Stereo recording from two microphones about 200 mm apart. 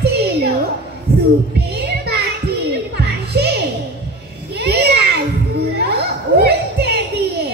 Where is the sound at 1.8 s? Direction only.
55° right (ahead or behind).